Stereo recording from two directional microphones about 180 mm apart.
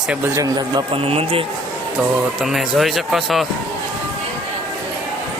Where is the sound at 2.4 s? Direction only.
Centre (ahead or behind).